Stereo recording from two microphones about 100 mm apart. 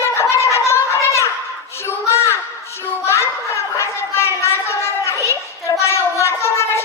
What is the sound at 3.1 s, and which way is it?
Children playing, 30° left (ahead or behind).